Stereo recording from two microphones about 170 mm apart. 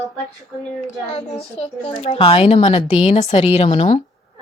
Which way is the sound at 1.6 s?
40° left (ahead or behind).